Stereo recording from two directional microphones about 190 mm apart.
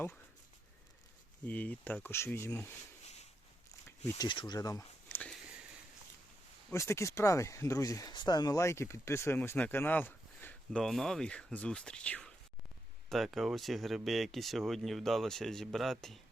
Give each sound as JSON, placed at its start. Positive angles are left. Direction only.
{"t": 1.5, "sound": "speech", "side_deg": 10}
{"t": 4.2, "sound": "speech", "side_deg": 25}
{"t": 5.0, "sound": "a sound", "side_deg": 5}
{"t": 6.7, "sound": "speech", "side_deg": 15}